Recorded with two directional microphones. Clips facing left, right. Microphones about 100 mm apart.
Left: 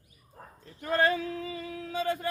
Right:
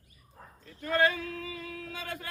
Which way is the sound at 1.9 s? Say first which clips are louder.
Left 14 dB; 30° left (ahead or behind).